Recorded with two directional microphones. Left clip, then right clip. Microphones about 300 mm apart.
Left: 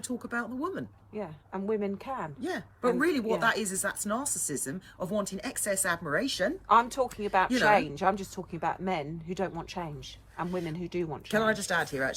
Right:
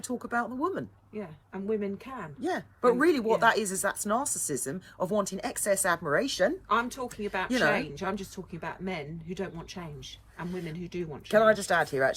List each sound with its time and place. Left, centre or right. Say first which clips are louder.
0.2 s a woman's voice: right 5 dB; centre
1.1 s speech: left 3 dB; centre
2.4 s a woman's voice: right 6 dB; centre
6.7 s speech: left 5 dB; centre
11.3 s a woman's voice: right 6 dB; centre